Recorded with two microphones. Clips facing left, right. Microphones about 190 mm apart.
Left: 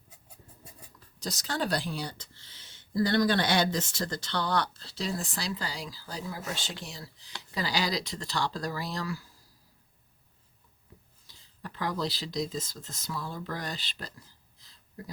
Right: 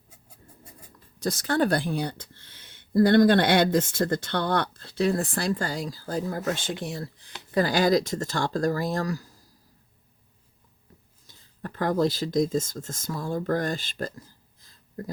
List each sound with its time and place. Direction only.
1.2 s speech: 55° right (ahead or behind)
11.3 s speech: 50° right (ahead or behind)